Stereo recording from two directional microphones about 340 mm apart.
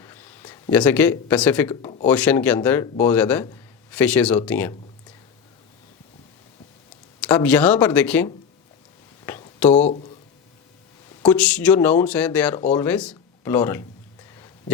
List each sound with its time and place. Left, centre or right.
0.0 s speech: centre
2.0 s a man's voice: centre
7.2 s a man's voice: centre
9.2 s a sound: centre
9.8 s speech: centre
11.2 s a man's voice: centre